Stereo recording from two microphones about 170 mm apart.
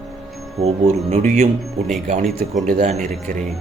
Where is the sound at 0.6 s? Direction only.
35° right (ahead or behind).